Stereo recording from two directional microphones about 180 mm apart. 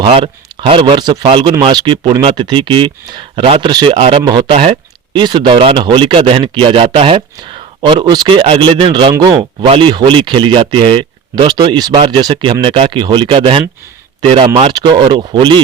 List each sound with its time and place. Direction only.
0.6 s a man's voice: 30° right (ahead or behind)